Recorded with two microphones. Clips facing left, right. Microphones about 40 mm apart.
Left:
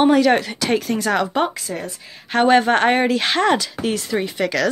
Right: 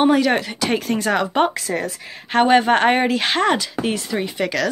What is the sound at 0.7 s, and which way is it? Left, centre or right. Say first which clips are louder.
Speech: even; right.